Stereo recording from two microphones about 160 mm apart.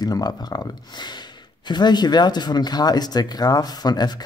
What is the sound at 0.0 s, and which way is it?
Speech, 25° left (ahead or behind).